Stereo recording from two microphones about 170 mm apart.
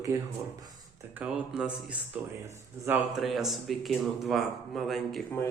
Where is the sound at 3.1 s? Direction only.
Centre (ahead or behind).